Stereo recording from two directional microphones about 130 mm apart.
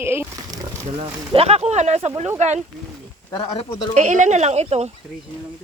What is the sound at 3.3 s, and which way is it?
Speech, 30° left (ahead or behind).